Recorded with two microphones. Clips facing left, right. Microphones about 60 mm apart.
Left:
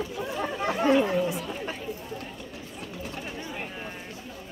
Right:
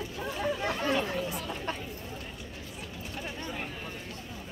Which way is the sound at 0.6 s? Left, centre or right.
Centre.